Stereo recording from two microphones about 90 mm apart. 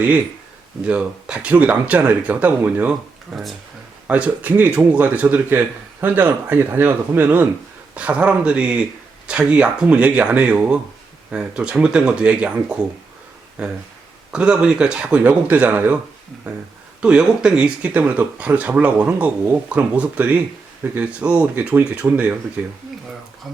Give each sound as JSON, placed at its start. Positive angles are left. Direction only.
{"t": 0.9, "sound": "speech", "side_deg": -15}
{"t": 3.3, "sound": "speech", "side_deg": 0}
{"t": 4.0, "sound": "speech", "side_deg": -15}
{"t": 17.0, "sound": "speech", "side_deg": -10}